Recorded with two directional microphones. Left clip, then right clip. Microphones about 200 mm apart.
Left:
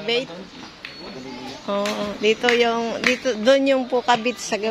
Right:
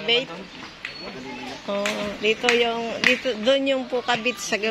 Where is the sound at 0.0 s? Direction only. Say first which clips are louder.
Right 1 dB; 5° left (ahead or behind).